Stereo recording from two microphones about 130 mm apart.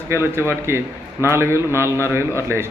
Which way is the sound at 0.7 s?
20° right (ahead or behind).